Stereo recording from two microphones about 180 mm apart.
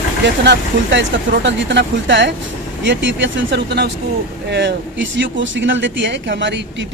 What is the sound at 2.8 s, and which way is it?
Speech, 90° right.